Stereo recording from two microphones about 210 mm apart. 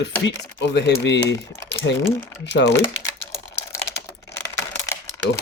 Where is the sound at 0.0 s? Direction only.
55° left (ahead or behind).